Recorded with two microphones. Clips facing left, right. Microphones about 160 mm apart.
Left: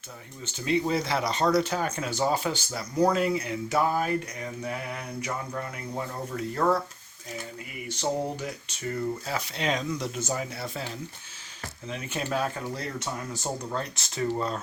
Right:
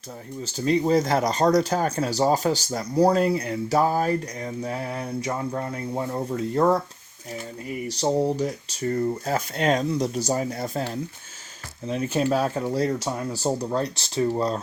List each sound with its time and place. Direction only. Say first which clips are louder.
0.4 s speech: right 5 dB; 40° right (ahead or behind)
7.9 s speech: right 6 dB; 35° right (ahead or behind)